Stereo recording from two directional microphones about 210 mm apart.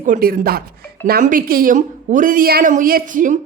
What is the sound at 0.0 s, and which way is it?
A woman's voice, 40° right (ahead or behind).